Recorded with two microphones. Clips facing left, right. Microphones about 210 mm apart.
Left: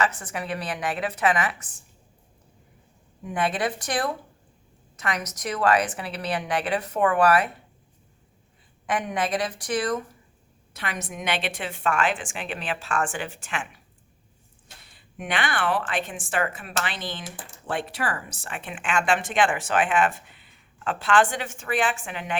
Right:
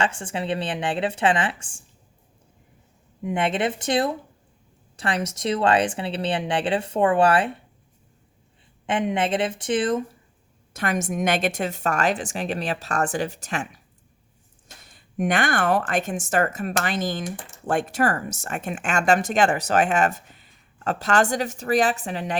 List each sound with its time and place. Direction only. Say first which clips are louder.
0.0 s speech: right 2 dB; 30° right (ahead or behind)
3.2 s speech: right 3 dB; 25° right (ahead or behind)
8.9 s speech: right 3 dB; 25° right (ahead or behind)
10.8 s speech: right 9 dB; 45° right (ahead or behind)
14.8 s speech: right 8 dB; 45° right (ahead or behind)